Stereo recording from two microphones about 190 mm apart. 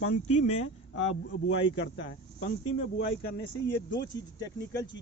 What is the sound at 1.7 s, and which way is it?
Speech, 75° left (ahead or behind).